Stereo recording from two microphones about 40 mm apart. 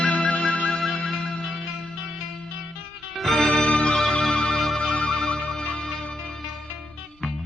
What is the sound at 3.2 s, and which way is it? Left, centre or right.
Music, centre.